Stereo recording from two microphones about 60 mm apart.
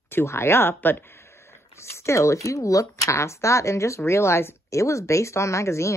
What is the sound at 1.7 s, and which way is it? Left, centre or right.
Speech, left.